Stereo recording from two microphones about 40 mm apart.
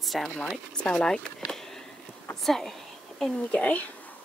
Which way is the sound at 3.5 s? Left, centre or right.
Left.